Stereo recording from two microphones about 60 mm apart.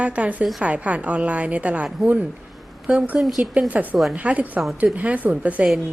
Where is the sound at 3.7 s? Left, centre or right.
Right.